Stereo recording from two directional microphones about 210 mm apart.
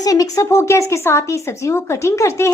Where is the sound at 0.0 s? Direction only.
15° left (ahead or behind).